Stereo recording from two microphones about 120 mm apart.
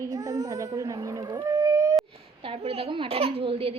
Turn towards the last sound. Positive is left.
turn(degrees=-55)  # may be behind; listen again after turning